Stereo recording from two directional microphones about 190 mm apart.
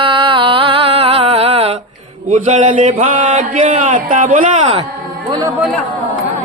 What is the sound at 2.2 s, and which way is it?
Speech, 40° right (ahead or behind).